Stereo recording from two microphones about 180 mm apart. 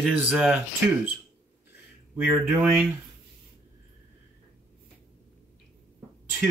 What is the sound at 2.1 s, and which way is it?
Speech, 10° right (ahead or behind).